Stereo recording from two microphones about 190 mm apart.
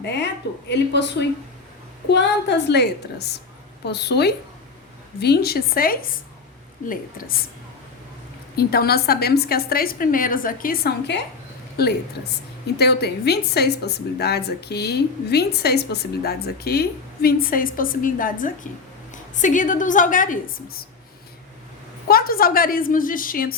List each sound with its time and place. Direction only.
0.0 s a woman's voice: 65° left (ahead or behind)
2.6 s a woman's voice: 60° left (ahead or behind)
8.5 s a woman's voice: 55° left (ahead or behind)
22.0 s a woman's voice: 50° left (ahead or behind)